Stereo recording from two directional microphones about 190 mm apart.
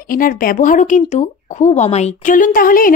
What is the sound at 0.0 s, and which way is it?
Speech, 50° left (ahead or behind).